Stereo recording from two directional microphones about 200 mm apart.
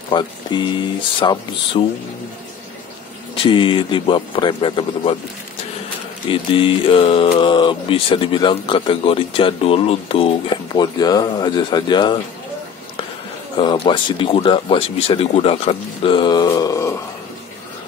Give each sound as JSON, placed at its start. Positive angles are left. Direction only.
{"t": 0.1, "sound": "mantra", "side_deg": 20}
{"t": 3.4, "sound": "mantra", "side_deg": 25}
{"t": 6.2, "sound": "mantra", "side_deg": 25}
{"t": 13.6, "sound": "mantra", "side_deg": 25}